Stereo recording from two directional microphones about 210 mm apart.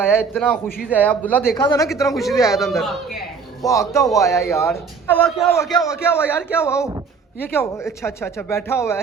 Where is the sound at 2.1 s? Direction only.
Centre (ahead or behind).